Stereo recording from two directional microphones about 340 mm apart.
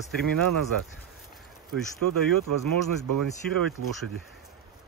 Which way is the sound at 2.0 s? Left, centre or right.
Right.